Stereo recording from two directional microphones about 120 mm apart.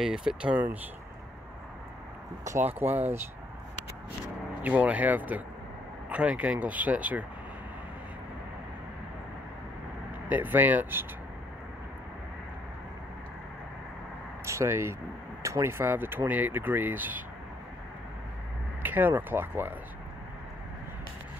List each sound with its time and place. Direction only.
0.0 s speech: 5° right (ahead or behind)
2.4 s speech: 20° right (ahead or behind)
4.6 s speech: 10° right (ahead or behind)
10.3 s speech: 15° right (ahead or behind)
14.4 s speech: 25° right (ahead or behind)
18.8 s speech: 15° right (ahead or behind)